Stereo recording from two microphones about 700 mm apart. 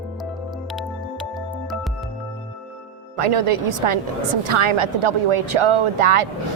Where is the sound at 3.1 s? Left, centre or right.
Right.